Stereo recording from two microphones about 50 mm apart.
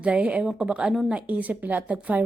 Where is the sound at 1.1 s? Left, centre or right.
Right.